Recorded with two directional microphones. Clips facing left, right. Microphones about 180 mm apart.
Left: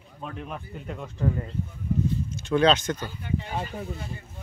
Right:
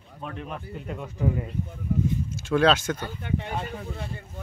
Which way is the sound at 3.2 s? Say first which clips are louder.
Right 1 dB; 60° right (ahead or behind).